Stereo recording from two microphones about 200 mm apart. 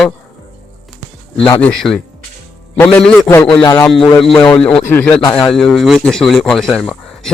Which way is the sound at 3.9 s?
Centre (ahead or behind).